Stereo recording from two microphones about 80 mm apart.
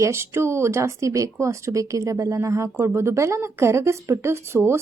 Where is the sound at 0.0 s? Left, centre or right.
Right.